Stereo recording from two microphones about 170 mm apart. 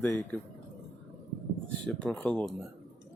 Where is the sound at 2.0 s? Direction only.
5° left (ahead or behind).